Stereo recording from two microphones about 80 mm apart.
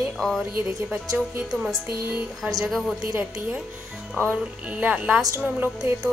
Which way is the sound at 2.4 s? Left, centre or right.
Right.